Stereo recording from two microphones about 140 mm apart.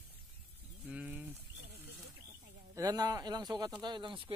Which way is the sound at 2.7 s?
25° right (ahead or behind).